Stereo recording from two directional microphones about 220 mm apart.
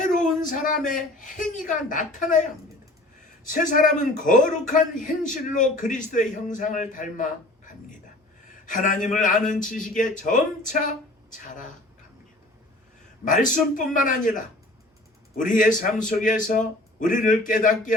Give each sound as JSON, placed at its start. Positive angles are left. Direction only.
{"t": 0.1, "sound": "a sound", "side_deg": 0}
{"t": 0.4, "sound": "a man's voice", "side_deg": 35}
{"t": 3.4, "sound": "a man's voice", "side_deg": 35}
{"t": 13.2, "sound": "a man's voice", "side_deg": 35}